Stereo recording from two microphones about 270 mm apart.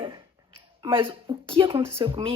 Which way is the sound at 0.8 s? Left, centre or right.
Centre.